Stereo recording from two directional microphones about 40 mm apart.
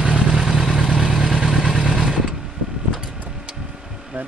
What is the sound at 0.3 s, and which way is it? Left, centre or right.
Vehicle, centre.